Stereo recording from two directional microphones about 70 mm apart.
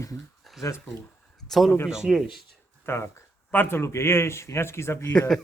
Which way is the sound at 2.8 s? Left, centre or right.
Left.